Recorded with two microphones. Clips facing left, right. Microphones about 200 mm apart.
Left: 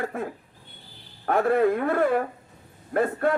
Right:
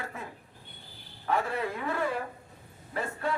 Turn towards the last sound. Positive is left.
turn(degrees=55)  # may be behind; listen again after turning